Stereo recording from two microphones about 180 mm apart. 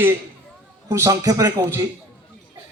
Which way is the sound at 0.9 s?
15° right (ahead or behind).